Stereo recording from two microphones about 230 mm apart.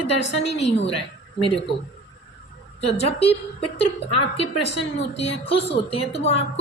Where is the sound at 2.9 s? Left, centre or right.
Left.